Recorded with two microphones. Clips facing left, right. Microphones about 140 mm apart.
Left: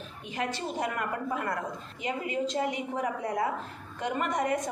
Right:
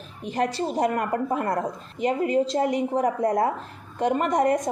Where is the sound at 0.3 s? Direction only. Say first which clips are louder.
Right 8 dB; 35° right (ahead or behind).